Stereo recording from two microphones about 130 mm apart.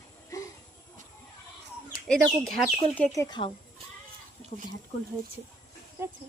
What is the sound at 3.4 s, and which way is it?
Speech, 60° left (ahead or behind).